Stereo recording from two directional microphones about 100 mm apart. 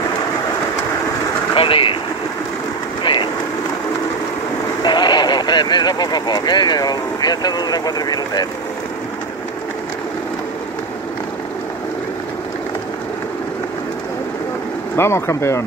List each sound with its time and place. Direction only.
1.5 s speech: 60° left (ahead or behind)
3.0 s vehicle: 55° left (ahead or behind)
4.8 s speech: 45° left (ahead or behind)
15.0 s speech: 25° left (ahead or behind)